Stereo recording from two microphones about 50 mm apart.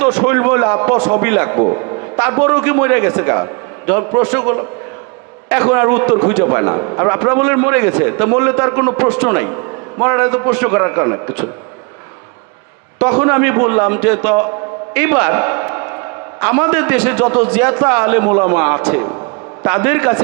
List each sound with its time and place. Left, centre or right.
0.0 s a man's voice: right
0.3 s a man's voice: right
0.9 s a man's voice: centre
1.2 s a man's voice: right
9.3 s a man's voice: right
10.8 s a man's voice: right
13.0 s a man's voice: right
15.7 s music: right
16.4 s a man's voice: right